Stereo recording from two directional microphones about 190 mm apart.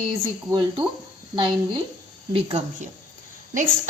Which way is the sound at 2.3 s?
35° right (ahead or behind).